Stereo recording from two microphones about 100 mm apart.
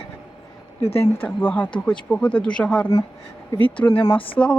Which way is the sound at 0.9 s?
20° left (ahead or behind).